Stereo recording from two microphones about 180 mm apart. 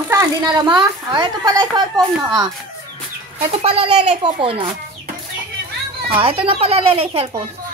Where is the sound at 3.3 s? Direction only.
30° right (ahead or behind).